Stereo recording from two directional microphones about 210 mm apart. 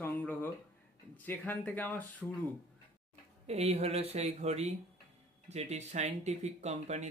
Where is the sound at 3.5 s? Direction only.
30° right (ahead or behind).